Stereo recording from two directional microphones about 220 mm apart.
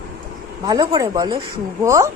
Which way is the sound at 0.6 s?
20° right (ahead or behind).